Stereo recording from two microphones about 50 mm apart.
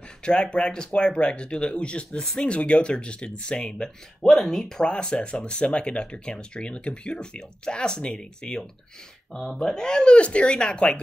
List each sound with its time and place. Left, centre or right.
0.2 s speech: centre